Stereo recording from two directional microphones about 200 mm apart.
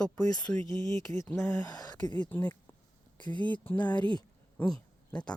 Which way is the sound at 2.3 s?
10° left (ahead or behind).